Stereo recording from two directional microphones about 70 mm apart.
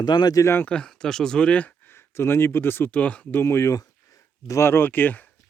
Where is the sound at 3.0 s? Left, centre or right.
Centre.